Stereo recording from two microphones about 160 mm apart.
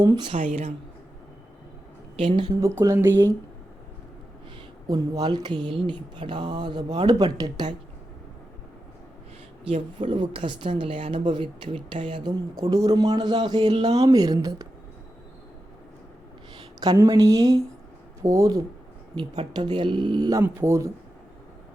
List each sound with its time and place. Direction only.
0.3 s a woman's voice: 45° right (ahead or behind)
2.1 s speech: 35° right (ahead or behind)
2.6 s speech: 20° right (ahead or behind)
4.9 s speech: 25° right (ahead or behind)
9.6 s speech: 35° right (ahead or behind)
16.8 s speech: 25° right (ahead or behind)